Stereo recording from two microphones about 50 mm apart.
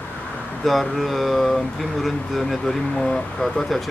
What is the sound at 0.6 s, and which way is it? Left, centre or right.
Speech, centre.